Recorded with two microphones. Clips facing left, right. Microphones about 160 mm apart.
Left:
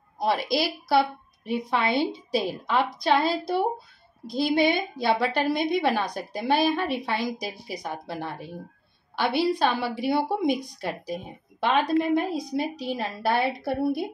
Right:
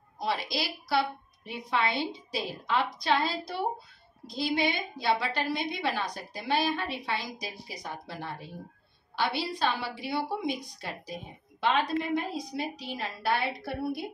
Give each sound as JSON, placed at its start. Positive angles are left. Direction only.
{"t": 0.2, "sound": "a woman's voice", "side_deg": 50}